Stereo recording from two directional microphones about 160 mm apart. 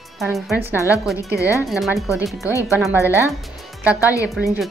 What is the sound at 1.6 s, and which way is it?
Speech, centre (ahead or behind).